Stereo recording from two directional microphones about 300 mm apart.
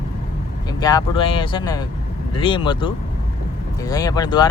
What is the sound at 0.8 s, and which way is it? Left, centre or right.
Speech, centre.